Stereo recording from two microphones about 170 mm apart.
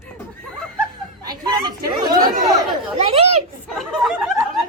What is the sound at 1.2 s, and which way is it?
Speech, 25° right (ahead or behind).